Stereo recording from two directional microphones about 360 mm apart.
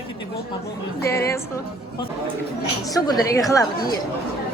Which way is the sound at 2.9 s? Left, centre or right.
Centre.